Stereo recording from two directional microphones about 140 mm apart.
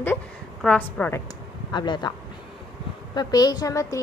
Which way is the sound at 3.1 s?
30° left (ahead or behind).